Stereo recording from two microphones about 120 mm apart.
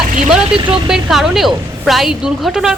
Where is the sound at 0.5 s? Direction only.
45° right (ahead or behind).